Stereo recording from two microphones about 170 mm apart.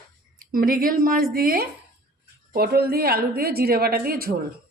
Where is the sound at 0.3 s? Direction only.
55° right (ahead or behind).